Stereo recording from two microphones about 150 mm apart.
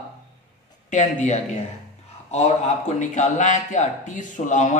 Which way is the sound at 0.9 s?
55° left (ahead or behind).